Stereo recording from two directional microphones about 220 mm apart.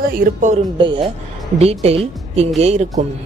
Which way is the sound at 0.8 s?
20° right (ahead or behind).